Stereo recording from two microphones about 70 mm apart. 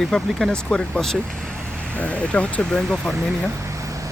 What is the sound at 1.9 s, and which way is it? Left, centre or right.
Speech, centre.